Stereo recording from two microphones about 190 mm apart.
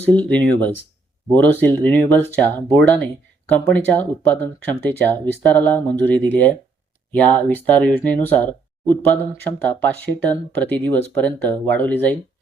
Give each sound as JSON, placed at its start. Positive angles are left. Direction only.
{"t": 0.0, "sound": "speech", "side_deg": 5}
{"t": 4.4, "sound": "speech", "side_deg": 10}